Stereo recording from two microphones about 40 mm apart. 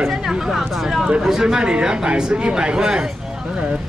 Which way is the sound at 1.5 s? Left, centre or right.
Right.